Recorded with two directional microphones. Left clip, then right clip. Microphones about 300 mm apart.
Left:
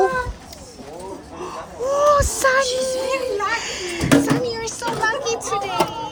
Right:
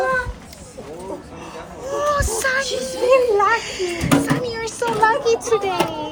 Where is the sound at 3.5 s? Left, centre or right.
Left.